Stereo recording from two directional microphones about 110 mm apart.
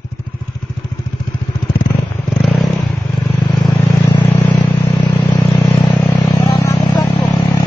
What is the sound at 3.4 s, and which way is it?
Vehicle, 40° left (ahead or behind).